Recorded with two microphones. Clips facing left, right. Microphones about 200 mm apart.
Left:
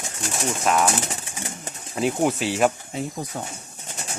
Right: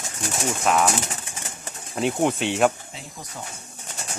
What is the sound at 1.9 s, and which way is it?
Speech, 5° left (ahead or behind).